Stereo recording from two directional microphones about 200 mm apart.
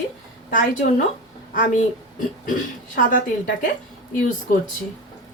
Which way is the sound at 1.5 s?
40° left (ahead or behind).